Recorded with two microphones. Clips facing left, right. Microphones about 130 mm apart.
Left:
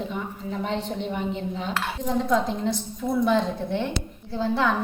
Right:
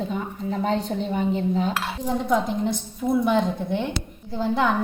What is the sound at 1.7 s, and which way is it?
Speech, 10° right (ahead or behind).